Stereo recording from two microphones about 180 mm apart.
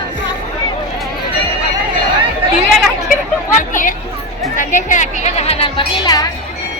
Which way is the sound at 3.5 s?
45° left (ahead or behind).